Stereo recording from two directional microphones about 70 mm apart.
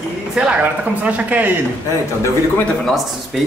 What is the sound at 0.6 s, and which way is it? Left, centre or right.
Speech, right.